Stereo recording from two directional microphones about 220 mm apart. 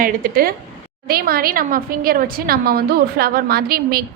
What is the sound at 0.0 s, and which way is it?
A woman's voice, 40° right (ahead or behind).